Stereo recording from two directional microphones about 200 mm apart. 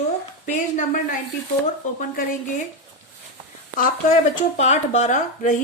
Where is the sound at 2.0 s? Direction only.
40° left (ahead or behind).